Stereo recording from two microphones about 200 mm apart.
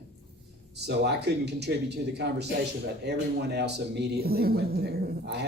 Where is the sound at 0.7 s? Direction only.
55° right (ahead or behind).